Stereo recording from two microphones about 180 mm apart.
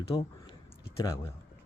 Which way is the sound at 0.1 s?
25° left (ahead or behind).